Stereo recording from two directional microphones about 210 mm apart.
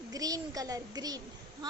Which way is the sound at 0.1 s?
15° right (ahead or behind).